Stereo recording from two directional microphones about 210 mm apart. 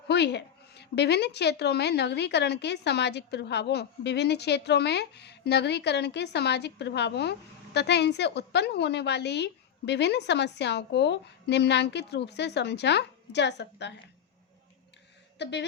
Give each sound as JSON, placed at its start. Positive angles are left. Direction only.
{"t": 0.1, "sound": "a woman's voice", "side_deg": 55}
{"t": 15.4, "sound": "a woman's voice", "side_deg": 55}